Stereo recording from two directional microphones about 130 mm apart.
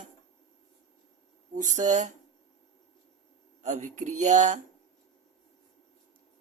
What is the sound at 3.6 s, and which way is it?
Speech, 70° right (ahead or behind).